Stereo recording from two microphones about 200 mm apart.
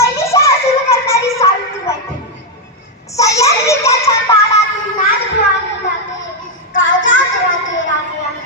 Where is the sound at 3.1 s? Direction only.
15° left (ahead or behind).